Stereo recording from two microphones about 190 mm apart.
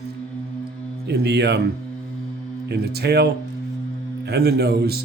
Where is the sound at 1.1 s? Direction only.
60° right (ahead or behind).